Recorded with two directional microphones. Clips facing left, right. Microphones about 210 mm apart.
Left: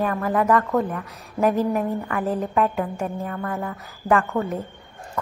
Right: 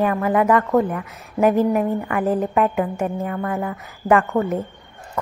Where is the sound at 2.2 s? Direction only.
Centre (ahead or behind).